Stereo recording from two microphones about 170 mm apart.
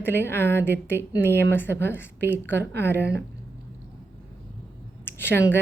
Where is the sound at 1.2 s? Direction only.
75° right (ahead or behind).